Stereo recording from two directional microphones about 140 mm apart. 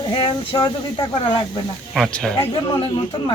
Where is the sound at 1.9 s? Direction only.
Centre (ahead or behind).